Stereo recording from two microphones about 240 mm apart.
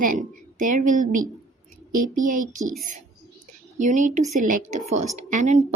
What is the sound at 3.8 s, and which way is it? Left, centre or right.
A woman's voice, right.